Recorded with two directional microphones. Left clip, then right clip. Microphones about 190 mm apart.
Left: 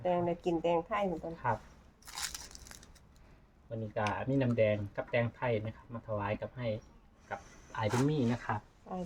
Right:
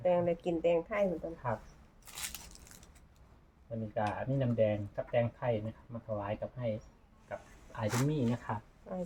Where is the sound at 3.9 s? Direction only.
50° left (ahead or behind).